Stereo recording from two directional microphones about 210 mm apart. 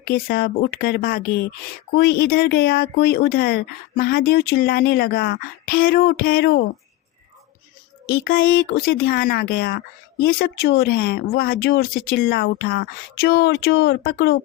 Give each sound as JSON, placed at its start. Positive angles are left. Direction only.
{"t": 0.0, "sound": "speech", "side_deg": 50}
{"t": 8.0, "sound": "speech", "side_deg": 45}